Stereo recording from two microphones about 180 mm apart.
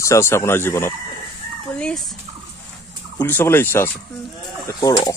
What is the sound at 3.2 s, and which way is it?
Speech, 10° left (ahead or behind).